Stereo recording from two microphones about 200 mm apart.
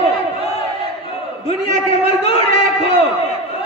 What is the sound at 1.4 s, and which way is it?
A man's voice, 30° left (ahead or behind).